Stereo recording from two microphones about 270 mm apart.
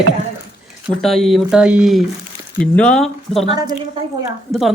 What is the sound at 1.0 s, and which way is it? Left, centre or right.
Speech, centre.